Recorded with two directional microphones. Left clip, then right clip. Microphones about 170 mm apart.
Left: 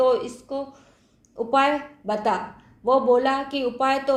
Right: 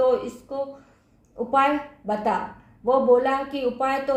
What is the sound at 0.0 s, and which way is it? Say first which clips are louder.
A woman's voice: left 1 dB; 30° left (ahead or behind).